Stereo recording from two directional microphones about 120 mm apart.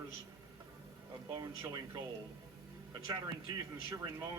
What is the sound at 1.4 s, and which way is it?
A man's voice, 30° right (ahead or behind).